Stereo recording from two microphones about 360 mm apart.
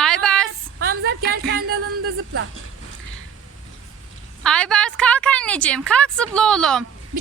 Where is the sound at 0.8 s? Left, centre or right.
Right.